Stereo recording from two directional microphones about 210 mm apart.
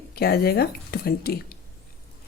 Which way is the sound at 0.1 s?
50° left (ahead or behind).